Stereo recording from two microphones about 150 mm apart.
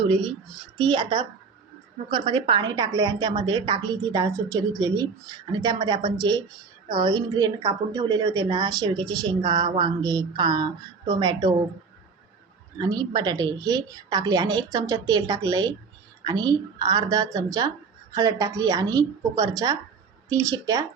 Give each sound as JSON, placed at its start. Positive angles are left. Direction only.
{"t": 0.0, "sound": "a child's voice", "side_deg": -35}
{"t": 12.8, "sound": "a woman's voice", "side_deg": -25}